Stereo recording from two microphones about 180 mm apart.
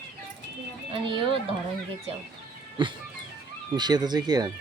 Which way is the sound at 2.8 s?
25° right (ahead or behind).